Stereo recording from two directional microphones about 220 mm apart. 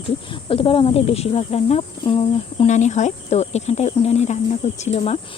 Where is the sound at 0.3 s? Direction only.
25° left (ahead or behind).